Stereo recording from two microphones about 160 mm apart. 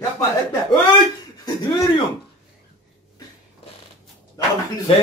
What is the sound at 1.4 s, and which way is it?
Speech, 30° left (ahead or behind).